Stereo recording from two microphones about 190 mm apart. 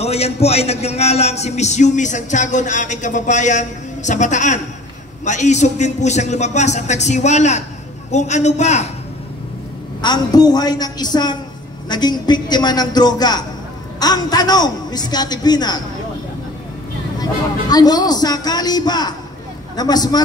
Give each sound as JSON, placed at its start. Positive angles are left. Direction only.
{"t": 0.0, "sound": "a man's voice", "side_deg": 35}
{"t": 10.0, "sound": "a man's voice", "side_deg": 20}
{"t": 17.2, "sound": "a man's voice", "side_deg": 20}